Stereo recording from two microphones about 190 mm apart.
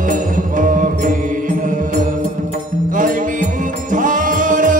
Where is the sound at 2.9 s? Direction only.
45° right (ahead or behind).